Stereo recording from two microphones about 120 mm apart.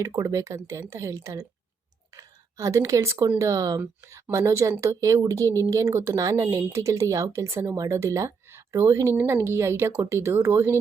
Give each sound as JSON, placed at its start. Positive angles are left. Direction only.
{"t": 0.0, "sound": "a woman's voice", "side_deg": -25}